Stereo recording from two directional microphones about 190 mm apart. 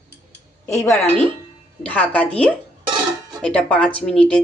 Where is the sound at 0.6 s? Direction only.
15° left (ahead or behind).